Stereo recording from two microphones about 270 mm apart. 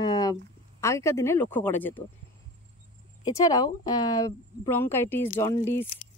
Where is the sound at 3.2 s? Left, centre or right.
Centre.